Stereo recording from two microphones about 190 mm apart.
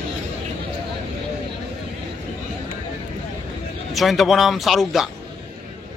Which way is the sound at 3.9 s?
Centre (ahead or behind).